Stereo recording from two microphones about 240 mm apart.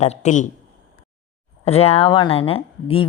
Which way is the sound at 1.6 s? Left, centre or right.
Left.